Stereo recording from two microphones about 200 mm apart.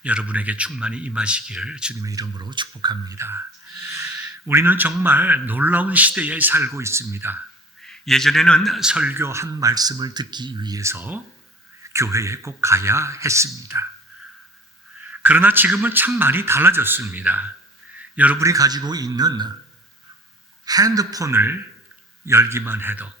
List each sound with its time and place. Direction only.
0.0 s speech: 5° right (ahead or behind)
2.0 s speech: 15° right (ahead or behind)
7.8 s speech: centre (ahead or behind); by 13.8 s 15° right (ahead or behind)
15.1 s speech: 10° right (ahead or behind)
20.7 s speech: 20° right (ahead or behind)